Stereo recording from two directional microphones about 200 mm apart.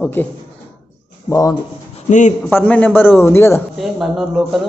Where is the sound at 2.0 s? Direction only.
35° left (ahead or behind).